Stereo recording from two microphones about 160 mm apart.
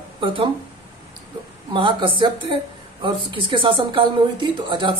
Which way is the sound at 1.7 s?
30° right (ahead or behind).